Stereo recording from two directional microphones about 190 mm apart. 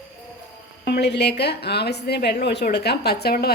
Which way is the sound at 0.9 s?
60° left (ahead or behind).